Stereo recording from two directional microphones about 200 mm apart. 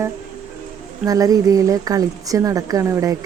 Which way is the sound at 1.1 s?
15° right (ahead or behind).